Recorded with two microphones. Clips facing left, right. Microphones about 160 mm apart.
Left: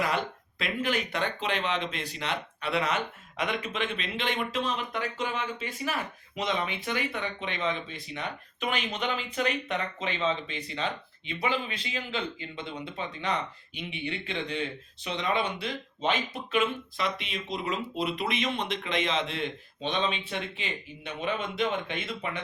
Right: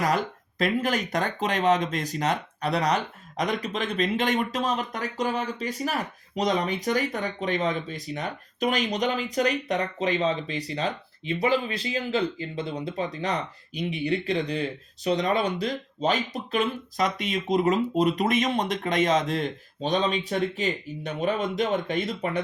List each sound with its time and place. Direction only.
0.0 s speech: 40° right (ahead or behind)